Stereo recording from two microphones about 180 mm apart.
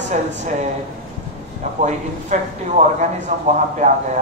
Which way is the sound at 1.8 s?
45° right (ahead or behind).